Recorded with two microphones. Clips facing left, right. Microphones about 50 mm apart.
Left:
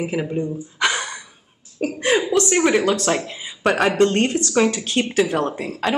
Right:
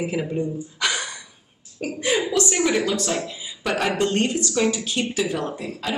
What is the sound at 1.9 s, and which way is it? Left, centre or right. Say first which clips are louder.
Speech: left 3 dB; left.